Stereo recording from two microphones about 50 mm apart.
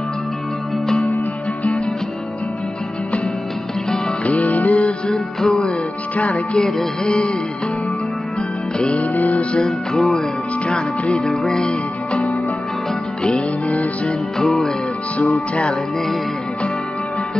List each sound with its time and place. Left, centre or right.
4.2 s music: left
5.1 s music: centre
6.1 s music: left
6.5 s music: centre
8.7 s music: centre
9.0 s music: left
9.7 s music: centre